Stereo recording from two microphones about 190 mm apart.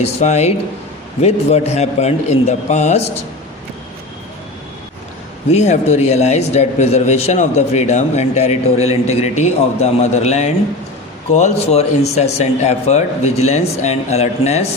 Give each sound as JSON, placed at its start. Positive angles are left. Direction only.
{"t": 0.0, "sound": "a man's voice", "side_deg": 35}
{"t": 5.5, "sound": "a man's voice", "side_deg": 35}